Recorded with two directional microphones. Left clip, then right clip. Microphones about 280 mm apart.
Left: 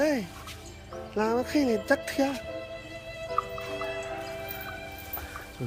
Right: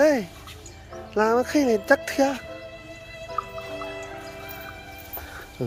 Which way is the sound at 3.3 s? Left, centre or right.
Centre.